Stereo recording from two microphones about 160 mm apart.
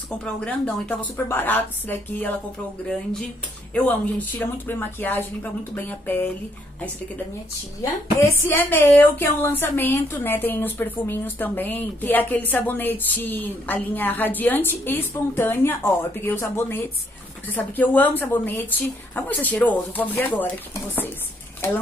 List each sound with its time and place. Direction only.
0.2 s a woman's voice: 10° left (ahead or behind)
8.4 s a woman's voice: 15° left (ahead or behind)